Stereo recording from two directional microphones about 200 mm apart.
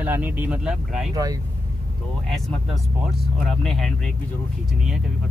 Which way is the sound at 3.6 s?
Centre (ahead or behind).